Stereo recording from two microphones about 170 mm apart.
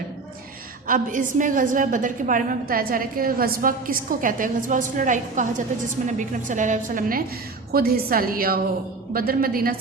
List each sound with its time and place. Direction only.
0.9 s a woman's voice: 50° right (ahead or behind)
7.7 s a woman's voice: 60° right (ahead or behind)